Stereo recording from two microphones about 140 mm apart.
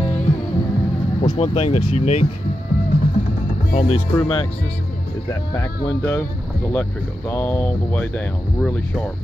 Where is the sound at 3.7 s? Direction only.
50° left (ahead or behind).